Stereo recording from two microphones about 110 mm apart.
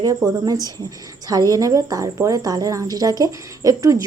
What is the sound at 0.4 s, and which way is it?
Speech, 35° right (ahead or behind).